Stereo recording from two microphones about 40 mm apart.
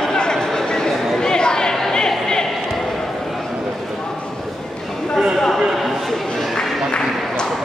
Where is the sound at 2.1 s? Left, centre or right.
Centre.